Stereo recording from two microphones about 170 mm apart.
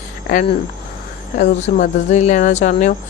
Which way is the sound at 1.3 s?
45° left (ahead or behind).